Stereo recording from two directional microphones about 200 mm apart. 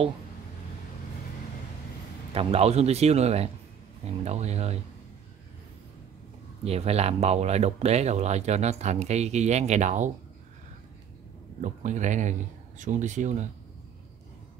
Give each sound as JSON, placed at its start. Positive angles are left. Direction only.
{"t": 2.3, "sound": "speech", "side_deg": -30}
{"t": 6.6, "sound": "speech", "side_deg": -30}
{"t": 11.6, "sound": "speech", "side_deg": -40}